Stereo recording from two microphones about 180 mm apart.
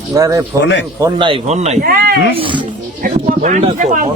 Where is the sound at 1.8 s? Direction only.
55° right (ahead or behind).